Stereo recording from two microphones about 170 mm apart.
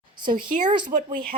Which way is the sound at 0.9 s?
50° right (ahead or behind).